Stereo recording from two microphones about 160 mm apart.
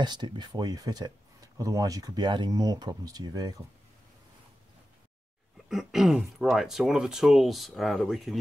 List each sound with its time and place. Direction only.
0.0 s speech: 25° right (ahead or behind)
5.7 s speech: centre (ahead or behind)